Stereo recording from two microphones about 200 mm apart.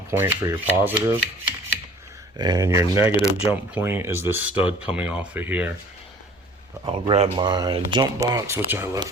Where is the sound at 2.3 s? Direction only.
20° right (ahead or behind).